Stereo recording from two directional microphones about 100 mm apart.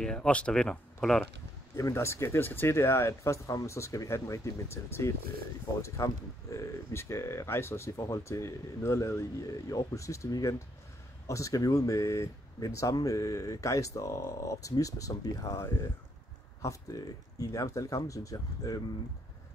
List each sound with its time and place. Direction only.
0.0 s speech: 5° left (ahead or behind)
1.8 s speech: 30° left (ahead or behind)